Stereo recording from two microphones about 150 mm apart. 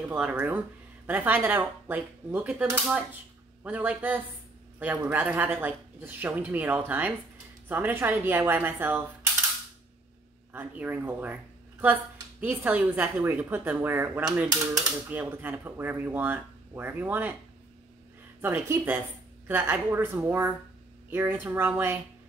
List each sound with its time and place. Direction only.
0.1 s a woman's voice: 10° right (ahead or behind)
10.5 s a woman's voice: 10° right (ahead or behind)
18.4 s a woman's voice: 15° right (ahead or behind)